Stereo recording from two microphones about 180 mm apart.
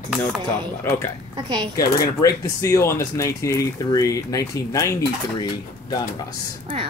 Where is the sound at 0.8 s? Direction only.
15° left (ahead or behind).